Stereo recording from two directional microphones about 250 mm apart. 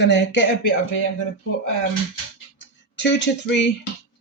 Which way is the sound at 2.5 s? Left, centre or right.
Left.